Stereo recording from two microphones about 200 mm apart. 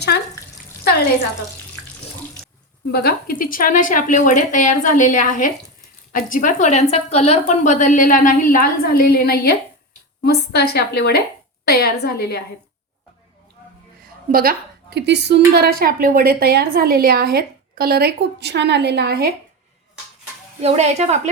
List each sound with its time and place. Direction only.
2.9 s a woman's voice: 50° left (ahead or behind)
14.3 s a woman's voice: 45° right (ahead or behind)
20.6 s speech: 35° right (ahead or behind)